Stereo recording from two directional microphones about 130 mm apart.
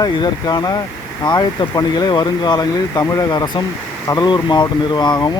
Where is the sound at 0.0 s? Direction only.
30° left (ahead or behind).